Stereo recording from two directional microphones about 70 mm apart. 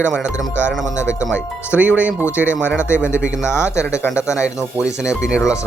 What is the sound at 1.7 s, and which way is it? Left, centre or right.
Speech, right.